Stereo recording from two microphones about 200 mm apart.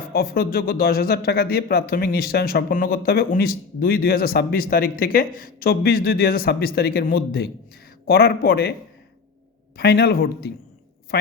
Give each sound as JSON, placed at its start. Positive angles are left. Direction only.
{"t": 0.1, "sound": "speech", "side_deg": 50}
{"t": 9.7, "sound": "speech", "side_deg": 55}